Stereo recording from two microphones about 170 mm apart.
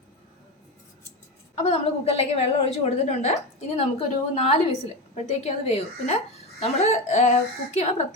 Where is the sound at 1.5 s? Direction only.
40° left (ahead or behind).